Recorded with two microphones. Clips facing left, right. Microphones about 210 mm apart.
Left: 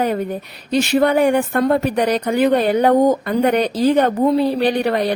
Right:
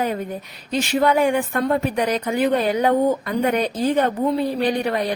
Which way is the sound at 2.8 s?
40° left (ahead or behind).